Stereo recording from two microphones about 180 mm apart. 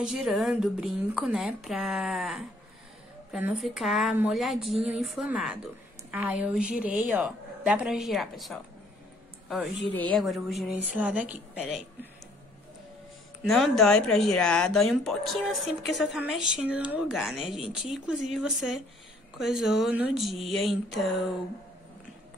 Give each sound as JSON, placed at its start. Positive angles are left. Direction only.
{"t": 0.0, "sound": "a woman's voice", "side_deg": -5}
{"t": 13.4, "sound": "speech", "side_deg": 0}